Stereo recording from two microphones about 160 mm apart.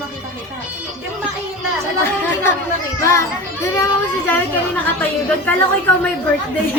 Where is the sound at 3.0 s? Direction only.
20° left (ahead or behind).